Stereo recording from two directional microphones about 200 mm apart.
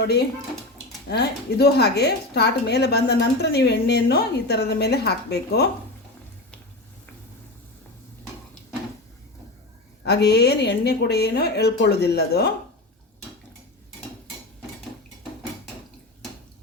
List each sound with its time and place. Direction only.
1.1 s a woman's voice: 55° left (ahead or behind)
10.0 s speech: 55° left (ahead or behind)